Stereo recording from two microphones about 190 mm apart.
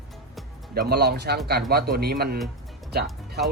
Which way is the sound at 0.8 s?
55° right (ahead or behind).